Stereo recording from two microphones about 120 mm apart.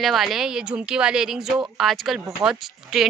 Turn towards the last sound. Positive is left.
turn(degrees=-5)  # may be behind; listen again after turning